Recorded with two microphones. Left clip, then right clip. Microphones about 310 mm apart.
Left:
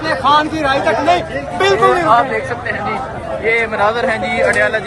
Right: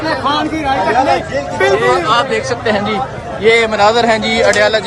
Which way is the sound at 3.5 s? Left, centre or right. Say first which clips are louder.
Right 4 dB; centre.